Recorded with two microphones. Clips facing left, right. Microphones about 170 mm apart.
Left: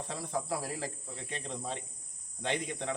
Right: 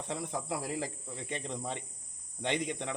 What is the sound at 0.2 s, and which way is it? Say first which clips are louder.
Speech: left 1 dB; 20° right (ahead or behind).